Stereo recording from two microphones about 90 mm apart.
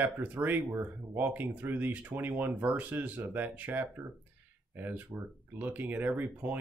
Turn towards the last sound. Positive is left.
turn(degrees=-20)  # may be behind; listen again after turning